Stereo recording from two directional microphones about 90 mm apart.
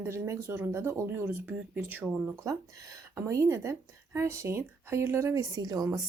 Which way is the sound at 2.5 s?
35° right (ahead or behind).